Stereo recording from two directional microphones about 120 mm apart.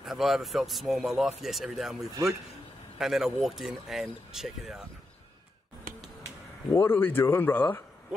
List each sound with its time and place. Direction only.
0.0 s speech: centre (ahead or behind)
6.7 s speech: 20° left (ahead or behind)